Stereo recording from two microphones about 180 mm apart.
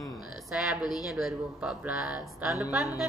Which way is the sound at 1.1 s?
Centre (ahead or behind).